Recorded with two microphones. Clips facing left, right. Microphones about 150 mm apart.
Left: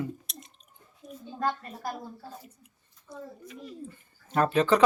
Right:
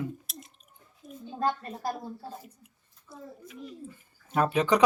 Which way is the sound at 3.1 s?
Centre (ahead or behind).